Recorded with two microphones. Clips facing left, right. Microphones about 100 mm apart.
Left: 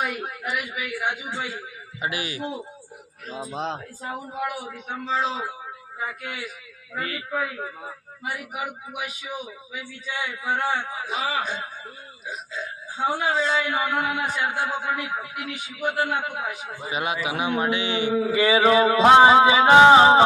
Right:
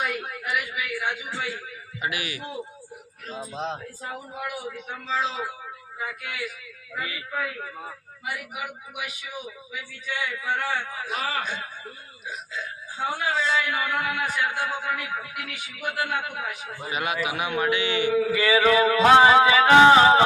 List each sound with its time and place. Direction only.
0.0 s a man's voice: 25° left (ahead or behind)
3.5 s speech: 90° left
4.1 s a man's voice: 30° left (ahead or behind)
6.9 s a man's voice: 40° left (ahead or behind)
7.2 s a man's voice: 25° left (ahead or behind)
13.3 s a man's voice: 35° left (ahead or behind)
13.7 s a man's voice: 25° left (ahead or behind)